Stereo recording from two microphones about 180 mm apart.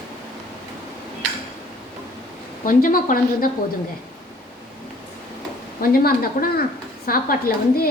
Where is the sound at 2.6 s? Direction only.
50° left (ahead or behind).